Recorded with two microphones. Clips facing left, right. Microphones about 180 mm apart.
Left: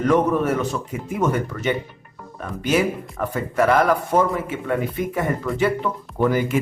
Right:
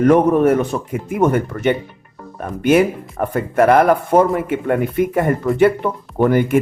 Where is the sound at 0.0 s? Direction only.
55° right (ahead or behind).